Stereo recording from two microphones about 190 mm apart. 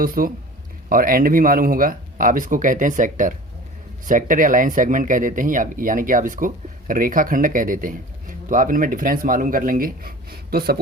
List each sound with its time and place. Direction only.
0.0 s speech: 50° right (ahead or behind)